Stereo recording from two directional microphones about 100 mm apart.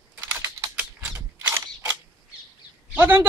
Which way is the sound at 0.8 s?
20° right (ahead or behind).